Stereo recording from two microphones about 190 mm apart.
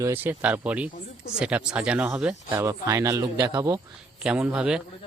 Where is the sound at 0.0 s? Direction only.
10° right (ahead or behind).